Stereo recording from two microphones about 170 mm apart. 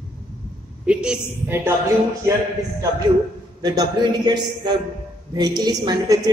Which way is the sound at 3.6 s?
25° right (ahead or behind).